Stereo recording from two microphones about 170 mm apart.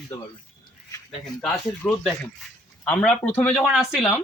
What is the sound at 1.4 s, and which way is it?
Speech, centre (ahead or behind).